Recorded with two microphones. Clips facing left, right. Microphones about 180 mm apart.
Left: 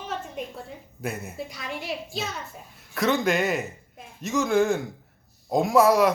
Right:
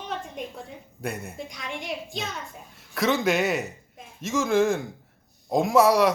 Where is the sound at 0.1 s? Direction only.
5° left (ahead or behind).